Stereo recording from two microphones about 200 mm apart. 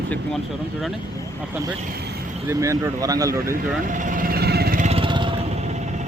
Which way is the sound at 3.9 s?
40° right (ahead or behind).